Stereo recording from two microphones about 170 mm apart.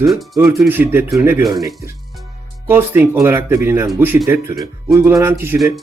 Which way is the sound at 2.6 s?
15° right (ahead or behind).